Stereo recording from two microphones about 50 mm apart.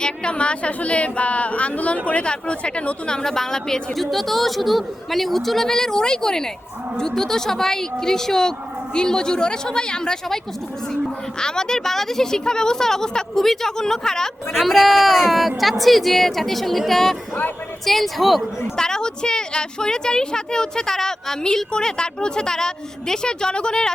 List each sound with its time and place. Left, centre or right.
0.0 s a woman's voice: centre
3.2 s a woman's voice: centre
14.5 s speech: centre
18.8 s a woman's voice: centre